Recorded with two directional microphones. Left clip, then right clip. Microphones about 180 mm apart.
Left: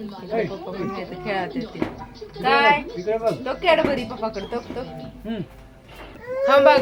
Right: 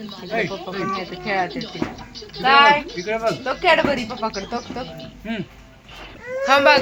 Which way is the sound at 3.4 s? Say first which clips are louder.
Right 3 dB; 30° right (ahead or behind).